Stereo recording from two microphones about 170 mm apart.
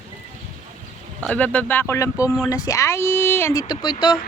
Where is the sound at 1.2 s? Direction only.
10° left (ahead or behind); by 3.9 s 25° left (ahead or behind).